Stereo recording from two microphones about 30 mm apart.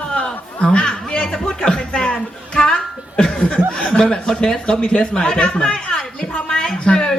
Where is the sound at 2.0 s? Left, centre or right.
Left.